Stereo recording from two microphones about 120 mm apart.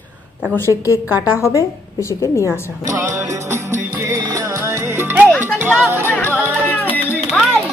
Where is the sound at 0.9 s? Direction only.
15° right (ahead or behind).